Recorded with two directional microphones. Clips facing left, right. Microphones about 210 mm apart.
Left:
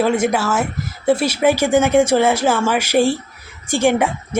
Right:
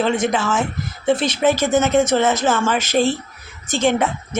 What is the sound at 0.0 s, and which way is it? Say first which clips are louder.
A woman's voice: left 2 dB; 10° left (ahead or behind).